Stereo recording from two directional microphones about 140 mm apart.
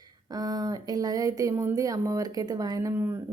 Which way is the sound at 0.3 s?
25° right (ahead or behind).